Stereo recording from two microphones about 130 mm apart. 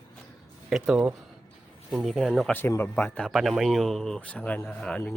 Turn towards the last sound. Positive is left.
turn(degrees=10)  # may be behind; listen again after turning